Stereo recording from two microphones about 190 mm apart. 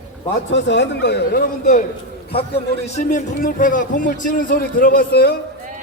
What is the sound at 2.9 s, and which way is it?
A man's voice, 40° left (ahead or behind).